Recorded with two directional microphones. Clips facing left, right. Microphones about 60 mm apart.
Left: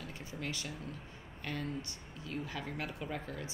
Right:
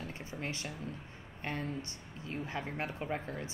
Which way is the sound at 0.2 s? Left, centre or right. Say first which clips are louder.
Even; right.